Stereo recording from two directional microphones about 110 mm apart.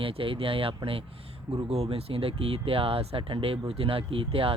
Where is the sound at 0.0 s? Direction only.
55° right (ahead or behind).